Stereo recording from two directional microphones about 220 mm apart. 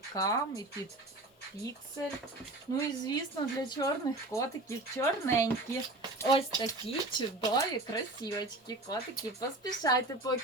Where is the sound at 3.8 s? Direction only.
15° left (ahead or behind).